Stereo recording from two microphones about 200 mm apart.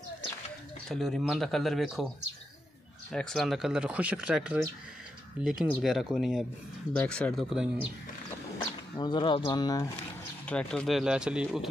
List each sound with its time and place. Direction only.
0.8 s speech: centre (ahead or behind)
3.1 s speech: 5° left (ahead or behind)
8.9 s speech: 20° left (ahead or behind)
10.4 s speech: 5° left (ahead or behind)